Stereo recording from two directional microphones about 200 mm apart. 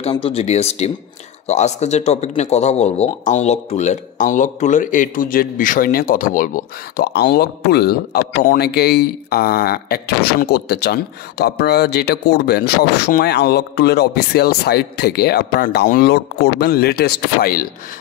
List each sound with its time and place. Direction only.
0.1 s speech: 30° left (ahead or behind); by 17.6 s 50° left (ahead or behind)